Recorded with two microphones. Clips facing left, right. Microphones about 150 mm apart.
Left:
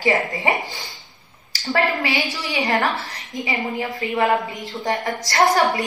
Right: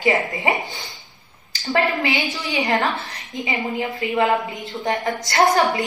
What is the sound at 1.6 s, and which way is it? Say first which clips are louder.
A woman's voice: right 1 dB; 20° right (ahead or behind).